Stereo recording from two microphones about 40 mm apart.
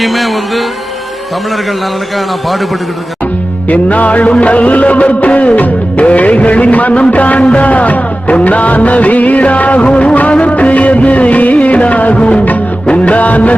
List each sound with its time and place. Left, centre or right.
0.0 s music: centre
3.7 s music: left